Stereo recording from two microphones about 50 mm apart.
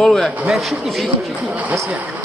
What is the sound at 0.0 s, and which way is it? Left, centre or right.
Speech, centre.